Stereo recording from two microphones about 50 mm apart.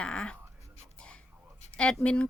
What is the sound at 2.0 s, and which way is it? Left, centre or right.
Speech, left.